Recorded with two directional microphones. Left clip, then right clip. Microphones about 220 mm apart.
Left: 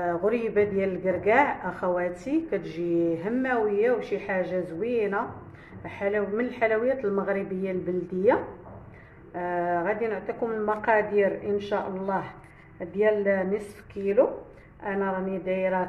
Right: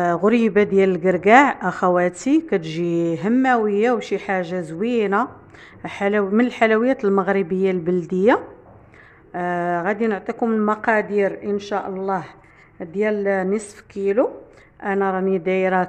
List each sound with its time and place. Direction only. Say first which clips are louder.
0.0 s a man's voice: right 8 dB; 50° right (ahead or behind)
14.8 s a man's voice: right 8 dB; 50° right (ahead or behind)